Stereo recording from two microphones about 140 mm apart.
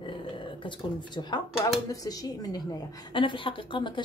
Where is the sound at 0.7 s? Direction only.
35° left (ahead or behind).